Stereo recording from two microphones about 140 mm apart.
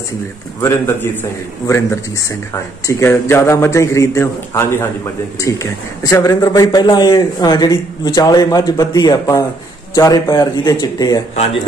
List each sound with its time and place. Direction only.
0.6 s a man's voice: 20° left (ahead or behind)